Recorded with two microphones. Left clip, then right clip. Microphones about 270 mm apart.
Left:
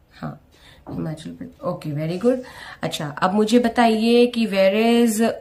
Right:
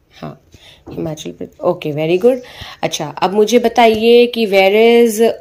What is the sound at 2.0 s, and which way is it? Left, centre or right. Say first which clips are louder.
A woman's voice: right 8 dB; centre.